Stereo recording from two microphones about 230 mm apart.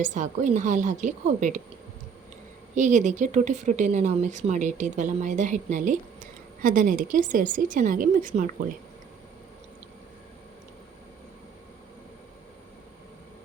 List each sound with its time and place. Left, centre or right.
0.0 s speech: right
2.7 s speech: right